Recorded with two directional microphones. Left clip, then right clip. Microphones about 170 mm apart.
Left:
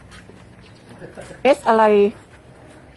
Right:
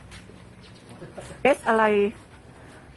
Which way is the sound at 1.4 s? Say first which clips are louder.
Left 6 dB; 5° left (ahead or behind).